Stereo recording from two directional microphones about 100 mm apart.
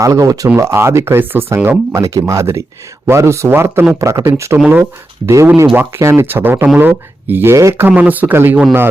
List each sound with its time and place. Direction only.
0.0 s speech: 35° right (ahead or behind)
1.9 s speech: 35° right (ahead or behind)